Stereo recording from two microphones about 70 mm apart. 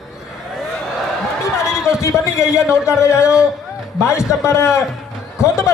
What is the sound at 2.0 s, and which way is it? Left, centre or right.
Speech, left.